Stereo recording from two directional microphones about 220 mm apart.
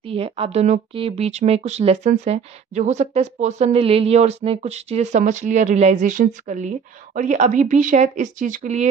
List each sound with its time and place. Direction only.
0.0 s a woman's voice: 25° right (ahead or behind)